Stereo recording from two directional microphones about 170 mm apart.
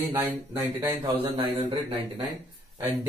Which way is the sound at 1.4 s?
35° right (ahead or behind).